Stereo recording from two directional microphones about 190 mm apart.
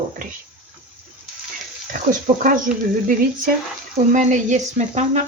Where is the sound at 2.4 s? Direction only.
45° right (ahead or behind).